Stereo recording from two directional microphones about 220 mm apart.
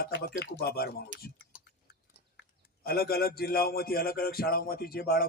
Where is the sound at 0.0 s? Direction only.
45° left (ahead or behind).